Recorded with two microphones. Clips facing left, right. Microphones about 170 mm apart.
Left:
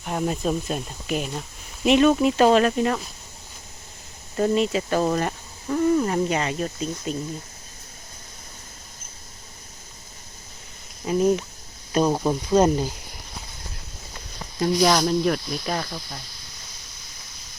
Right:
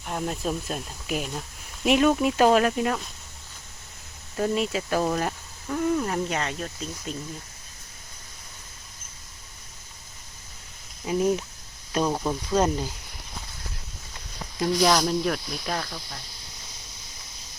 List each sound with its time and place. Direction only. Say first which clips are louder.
0.0 s speech: left 4 dB; 5° left (ahead or behind)
4.4 s speech: left 4 dB; centre (ahead or behind)
11.0 s speech: left 3 dB; 5° right (ahead or behind)
12.0 s speech: left 4 dB; 15° left (ahead or behind)
14.8 s speech: left 2 dB; centre (ahead or behind)